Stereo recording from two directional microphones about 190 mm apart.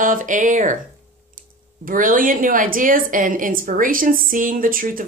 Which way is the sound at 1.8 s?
45° right (ahead or behind).